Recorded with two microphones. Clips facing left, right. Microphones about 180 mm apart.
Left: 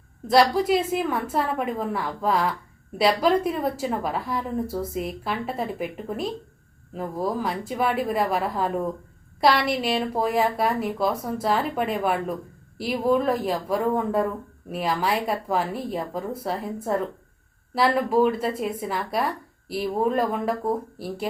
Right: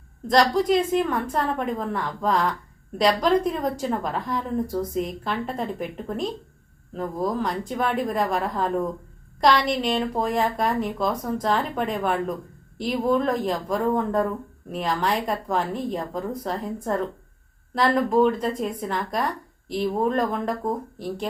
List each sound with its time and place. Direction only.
0.3 s speech: 5° left (ahead or behind)